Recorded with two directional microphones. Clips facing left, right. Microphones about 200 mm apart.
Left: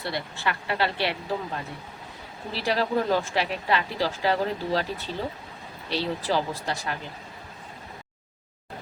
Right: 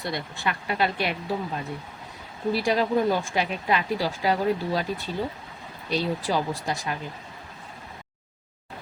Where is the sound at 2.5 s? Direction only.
15° right (ahead or behind).